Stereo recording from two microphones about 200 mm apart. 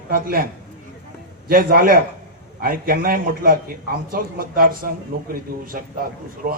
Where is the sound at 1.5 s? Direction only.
45° right (ahead or behind).